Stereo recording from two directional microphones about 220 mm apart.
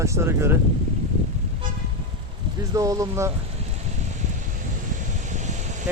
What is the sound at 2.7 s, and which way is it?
Speech, 15° right (ahead or behind).